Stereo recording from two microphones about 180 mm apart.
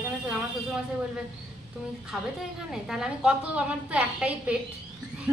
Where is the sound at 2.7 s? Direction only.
5° right (ahead or behind).